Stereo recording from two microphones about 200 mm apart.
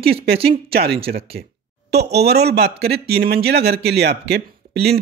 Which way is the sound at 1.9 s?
55° right (ahead or behind).